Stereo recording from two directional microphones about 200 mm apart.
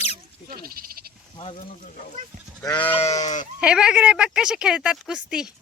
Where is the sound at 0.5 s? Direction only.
45° right (ahead or behind).